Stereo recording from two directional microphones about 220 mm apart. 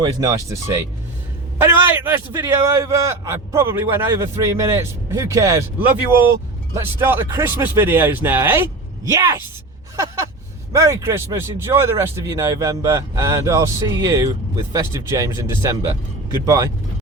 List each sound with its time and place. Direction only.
0.0 s speech: 15° right (ahead or behind)
1.8 s speech: 10° right (ahead or behind)
10.7 s speech: 15° right (ahead or behind)